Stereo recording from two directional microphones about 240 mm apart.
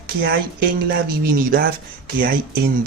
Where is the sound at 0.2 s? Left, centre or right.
Right.